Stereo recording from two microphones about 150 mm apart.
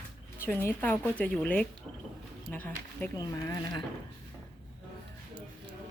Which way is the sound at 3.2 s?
25° left (ahead or behind).